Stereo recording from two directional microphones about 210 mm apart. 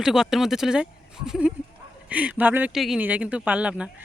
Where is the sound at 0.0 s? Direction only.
Centre (ahead or behind).